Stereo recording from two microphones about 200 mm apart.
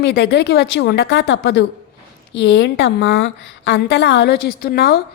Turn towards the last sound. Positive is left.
turn(degrees=50)  # may be behind; listen again after turning